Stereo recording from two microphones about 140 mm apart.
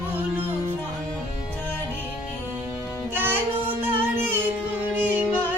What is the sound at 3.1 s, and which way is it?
Music, 15° right (ahead or behind).